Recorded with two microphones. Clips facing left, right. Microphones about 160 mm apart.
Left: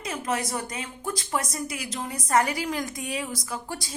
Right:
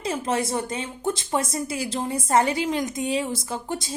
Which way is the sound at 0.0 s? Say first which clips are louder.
Right 4 dB; 30° right (ahead or behind).